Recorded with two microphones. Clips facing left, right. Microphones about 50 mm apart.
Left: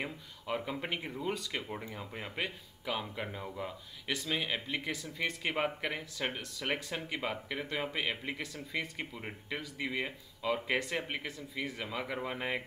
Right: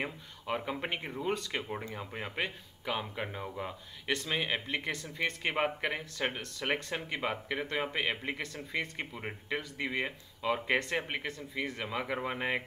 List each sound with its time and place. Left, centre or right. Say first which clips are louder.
0.0 s speech: right 2 dB; centre